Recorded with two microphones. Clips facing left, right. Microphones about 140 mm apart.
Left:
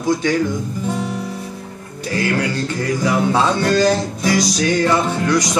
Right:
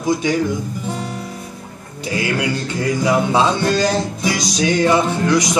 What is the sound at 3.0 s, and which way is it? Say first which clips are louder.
Music: right 1 dB; 20° right (ahead or behind).